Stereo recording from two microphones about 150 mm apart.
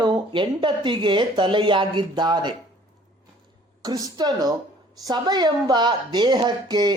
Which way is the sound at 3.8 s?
25° right (ahead or behind).